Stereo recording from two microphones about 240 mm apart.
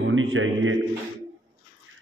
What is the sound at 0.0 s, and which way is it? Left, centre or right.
Speech, right.